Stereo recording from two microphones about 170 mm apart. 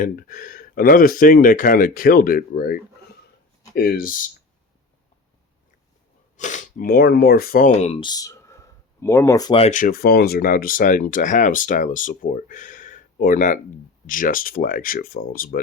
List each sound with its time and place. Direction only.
0.0 s speech: 55° left (ahead or behind)
3.8 s speech: 60° left (ahead or behind)
6.3 s speech: 45° left (ahead or behind)
8.0 s a sound: 20° left (ahead or behind)
9.6 s speech: 45° left (ahead or behind)